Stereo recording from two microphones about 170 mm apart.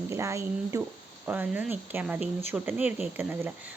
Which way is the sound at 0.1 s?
15° right (ahead or behind).